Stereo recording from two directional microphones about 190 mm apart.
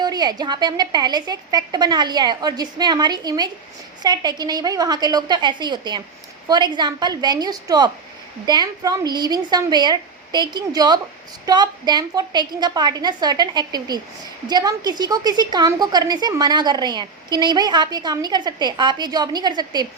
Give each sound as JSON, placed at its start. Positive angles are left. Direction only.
{"t": 0.0, "sound": "a woman's voice", "side_deg": -20}